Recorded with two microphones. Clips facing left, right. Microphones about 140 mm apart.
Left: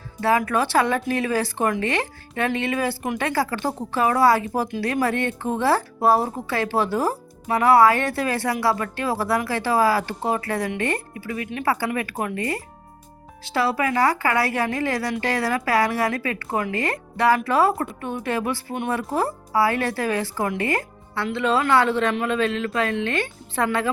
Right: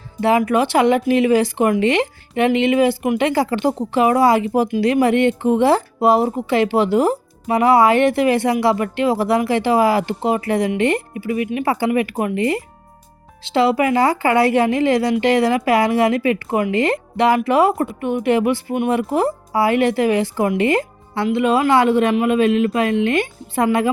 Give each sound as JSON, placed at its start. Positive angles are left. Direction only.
{"t": 0.2, "sound": "speech", "side_deg": -20}